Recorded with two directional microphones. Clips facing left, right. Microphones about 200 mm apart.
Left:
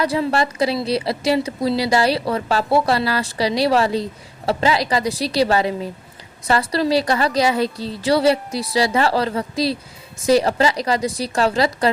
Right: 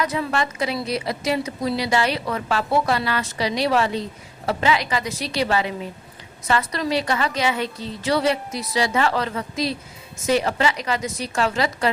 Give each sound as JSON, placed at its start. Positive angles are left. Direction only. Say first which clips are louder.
{"t": 0.0, "sound": "a woman's voice", "louder": "left 4 dB", "side_deg": 30}